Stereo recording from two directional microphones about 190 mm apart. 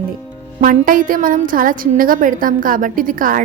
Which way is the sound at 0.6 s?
45° right (ahead or behind).